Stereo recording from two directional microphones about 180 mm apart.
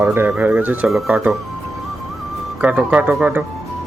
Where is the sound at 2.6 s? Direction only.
10° right (ahead or behind).